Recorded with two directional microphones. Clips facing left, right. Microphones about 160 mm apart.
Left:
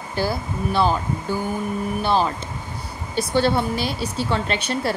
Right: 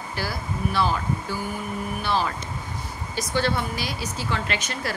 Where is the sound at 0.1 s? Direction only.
25° left (ahead or behind).